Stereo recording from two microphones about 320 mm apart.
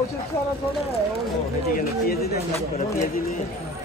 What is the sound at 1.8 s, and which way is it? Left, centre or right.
Speech, left.